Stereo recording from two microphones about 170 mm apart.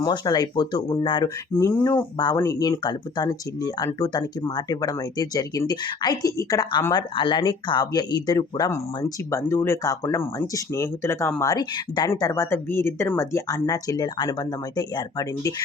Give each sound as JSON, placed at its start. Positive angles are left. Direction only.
{"t": 0.0, "sound": "speech", "side_deg": 25}